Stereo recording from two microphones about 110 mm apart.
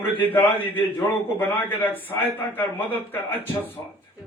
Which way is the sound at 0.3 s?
15° left (ahead or behind).